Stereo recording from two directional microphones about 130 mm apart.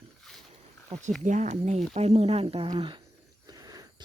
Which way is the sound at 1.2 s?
65° right (ahead or behind).